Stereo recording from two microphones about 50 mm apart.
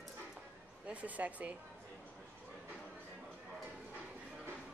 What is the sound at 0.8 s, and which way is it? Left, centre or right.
Speech, right.